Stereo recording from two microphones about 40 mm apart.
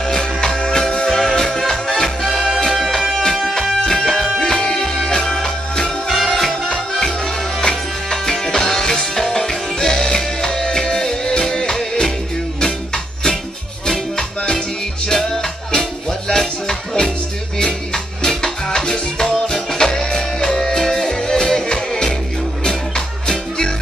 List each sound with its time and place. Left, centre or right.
0.0 s music: centre
6.5 s music: centre